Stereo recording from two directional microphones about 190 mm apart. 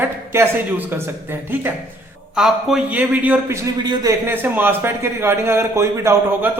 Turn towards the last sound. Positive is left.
turn(degrees=-15)  # may be behind; listen again after turning